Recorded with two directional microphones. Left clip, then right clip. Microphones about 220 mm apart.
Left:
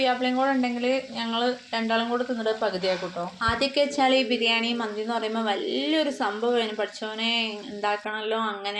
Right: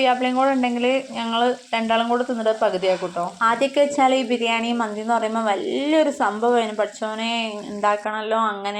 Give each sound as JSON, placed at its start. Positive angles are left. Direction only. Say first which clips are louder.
{"t": 0.0, "sound": "a woman's voice", "louder": "right 5 dB", "side_deg": -30}